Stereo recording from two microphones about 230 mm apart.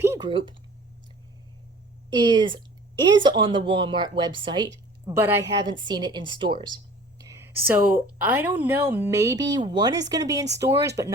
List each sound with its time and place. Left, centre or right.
0.0 s a sound: centre
0.3 s speech: right
2.1 s speech: centre
7.2 s a woman's voice: centre